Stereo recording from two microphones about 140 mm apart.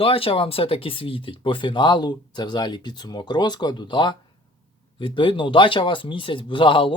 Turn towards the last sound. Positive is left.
turn(degrees=35)  # may be behind; listen again after turning